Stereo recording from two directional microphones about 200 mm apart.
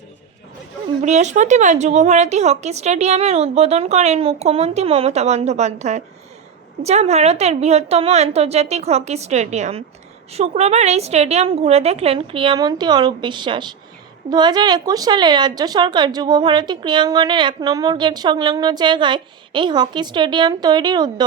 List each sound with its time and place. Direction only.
1.0 s a woman's voice: 35° right (ahead or behind)